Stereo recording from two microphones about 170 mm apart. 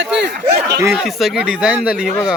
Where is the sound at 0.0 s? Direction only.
80° right.